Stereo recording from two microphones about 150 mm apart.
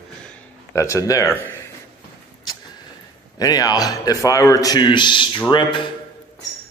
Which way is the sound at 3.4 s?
25° left (ahead or behind).